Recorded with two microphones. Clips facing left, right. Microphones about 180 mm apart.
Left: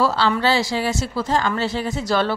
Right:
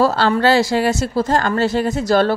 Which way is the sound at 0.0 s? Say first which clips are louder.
Right 4 dB; 45° right (ahead or behind).